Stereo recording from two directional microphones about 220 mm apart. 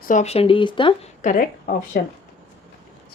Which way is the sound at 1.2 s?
40° left (ahead or behind).